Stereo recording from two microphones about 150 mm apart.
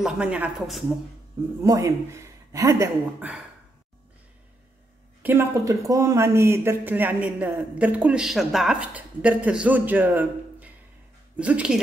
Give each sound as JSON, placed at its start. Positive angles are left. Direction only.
{"t": 0.0, "sound": "speech", "side_deg": -5}
{"t": 1.6, "sound": "a man's voice", "side_deg": -20}
{"t": 3.2, "sound": "speech", "side_deg": -10}
{"t": 5.2, "sound": "speech", "side_deg": -15}